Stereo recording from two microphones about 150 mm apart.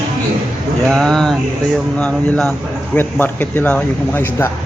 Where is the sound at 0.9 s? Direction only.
5° left (ahead or behind).